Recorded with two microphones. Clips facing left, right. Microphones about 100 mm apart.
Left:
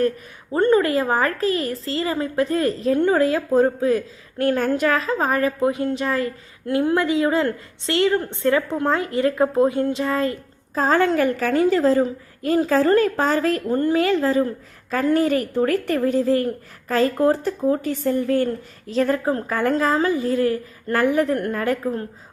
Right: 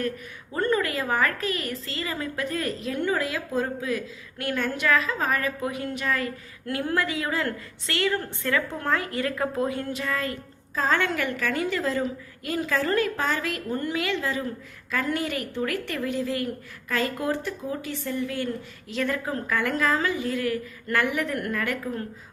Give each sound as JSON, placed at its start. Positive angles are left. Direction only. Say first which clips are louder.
{"t": 0.5, "sound": "a woman's voice", "louder": "left 8 dB", "side_deg": 30}